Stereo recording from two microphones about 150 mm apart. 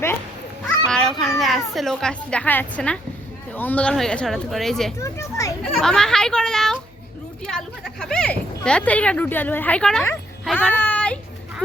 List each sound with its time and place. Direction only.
0.9 s a woman's voice: 5° left (ahead or behind)
4.9 s a child's voice: 20° left (ahead or behind)
5.7 s speech: 5° left (ahead or behind)
10.6 s a sound: 10° left (ahead or behind)